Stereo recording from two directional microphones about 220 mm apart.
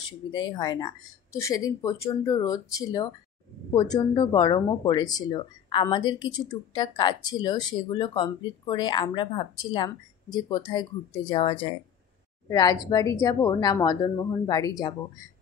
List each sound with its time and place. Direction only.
0.3 s a woman's voice: 20° left (ahead or behind)